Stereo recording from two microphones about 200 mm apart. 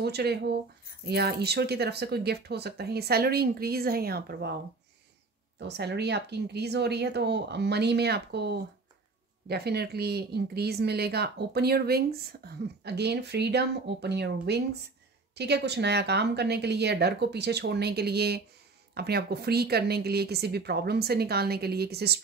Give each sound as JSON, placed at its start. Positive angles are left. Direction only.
{"t": 0.0, "sound": "speech", "side_deg": -55}
{"t": 5.6, "sound": "speech", "side_deg": -55}